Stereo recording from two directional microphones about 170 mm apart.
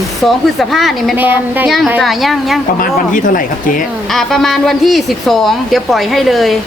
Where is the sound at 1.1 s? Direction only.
10° right (ahead or behind).